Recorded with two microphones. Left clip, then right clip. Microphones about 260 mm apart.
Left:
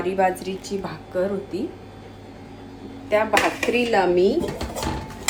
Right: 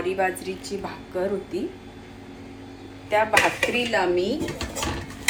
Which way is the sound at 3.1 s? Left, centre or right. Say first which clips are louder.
Even; centre.